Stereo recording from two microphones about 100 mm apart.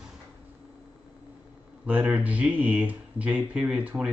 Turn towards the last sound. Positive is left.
turn(degrees=-10)  # may be behind; listen again after turning